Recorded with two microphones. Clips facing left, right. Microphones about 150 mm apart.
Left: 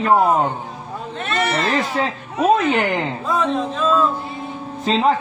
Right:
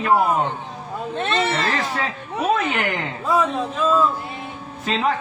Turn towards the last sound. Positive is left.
turn(degrees=30)  # may be behind; listen again after turning